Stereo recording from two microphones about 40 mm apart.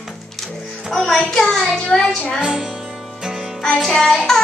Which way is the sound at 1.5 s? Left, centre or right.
Centre.